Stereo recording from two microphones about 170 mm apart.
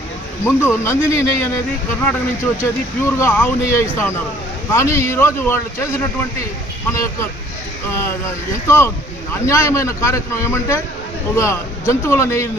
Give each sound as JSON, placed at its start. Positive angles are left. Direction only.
{"t": 0.4, "sound": "speech", "side_deg": 15}
{"t": 3.0, "sound": "speech", "side_deg": 15}
{"t": 8.6, "sound": "speech", "side_deg": 15}